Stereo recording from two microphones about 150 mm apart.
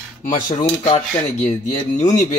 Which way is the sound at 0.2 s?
60° left (ahead or behind).